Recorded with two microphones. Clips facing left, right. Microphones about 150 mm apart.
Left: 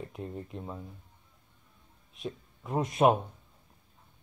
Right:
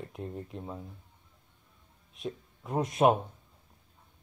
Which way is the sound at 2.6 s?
45° right (ahead or behind).